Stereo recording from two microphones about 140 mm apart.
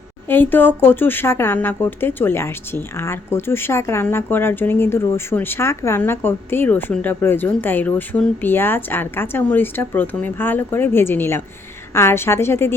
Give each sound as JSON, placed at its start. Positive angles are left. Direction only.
{"t": 0.3, "sound": "a woman's voice", "side_deg": 15}